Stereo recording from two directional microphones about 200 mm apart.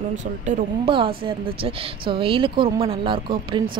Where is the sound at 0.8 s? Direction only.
25° right (ahead or behind).